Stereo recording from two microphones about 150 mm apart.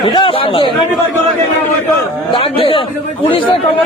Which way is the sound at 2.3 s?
35° left (ahead or behind).